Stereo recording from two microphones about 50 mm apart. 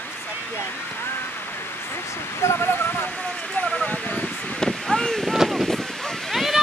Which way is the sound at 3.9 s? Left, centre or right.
Left.